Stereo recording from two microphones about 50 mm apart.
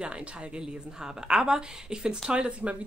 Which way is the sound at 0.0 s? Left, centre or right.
Right.